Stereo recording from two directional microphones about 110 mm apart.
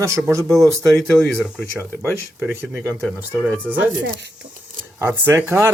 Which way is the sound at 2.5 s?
20° right (ahead or behind).